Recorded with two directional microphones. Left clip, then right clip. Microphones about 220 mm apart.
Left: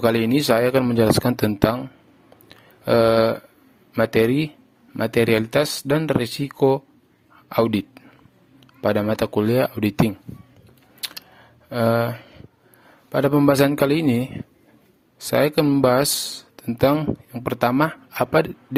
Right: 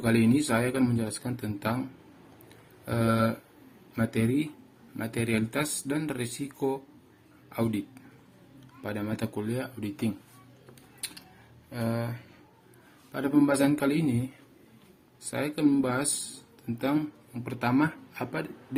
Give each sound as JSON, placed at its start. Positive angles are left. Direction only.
{"t": 0.0, "sound": "speech", "side_deg": 45}
{"t": 2.5, "sound": "a sound", "side_deg": 45}
{"t": 3.9, "sound": "a man's voice", "side_deg": 40}
{"t": 11.7, "sound": "speech", "side_deg": 45}
{"t": 15.3, "sound": "speech", "side_deg": 45}